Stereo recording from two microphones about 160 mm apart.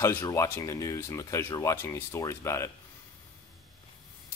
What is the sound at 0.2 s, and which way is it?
Speech, 20° left (ahead or behind).